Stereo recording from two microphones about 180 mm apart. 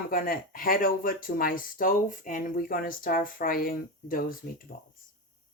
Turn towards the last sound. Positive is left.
turn(degrees=55)  # may be behind; listen again after turning